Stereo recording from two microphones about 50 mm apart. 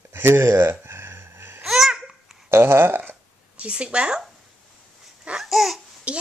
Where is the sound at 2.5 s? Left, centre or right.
Right.